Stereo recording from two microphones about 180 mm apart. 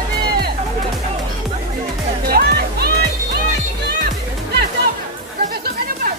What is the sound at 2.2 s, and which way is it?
Music, 55° right (ahead or behind).